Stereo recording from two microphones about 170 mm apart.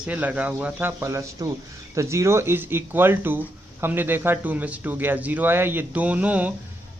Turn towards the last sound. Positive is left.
turn(degrees=-10)  # may be behind; listen again after turning